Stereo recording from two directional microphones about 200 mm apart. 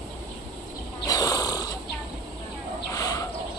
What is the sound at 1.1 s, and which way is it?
Insect, 20° left (ahead or behind).